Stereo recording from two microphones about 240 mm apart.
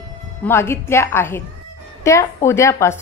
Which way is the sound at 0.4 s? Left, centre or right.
Centre.